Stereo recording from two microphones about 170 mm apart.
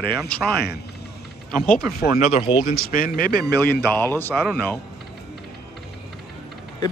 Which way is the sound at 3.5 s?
10° left (ahead or behind).